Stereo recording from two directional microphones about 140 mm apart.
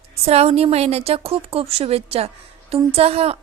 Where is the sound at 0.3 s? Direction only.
50° right (ahead or behind).